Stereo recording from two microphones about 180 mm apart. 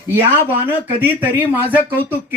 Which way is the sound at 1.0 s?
10° right (ahead or behind).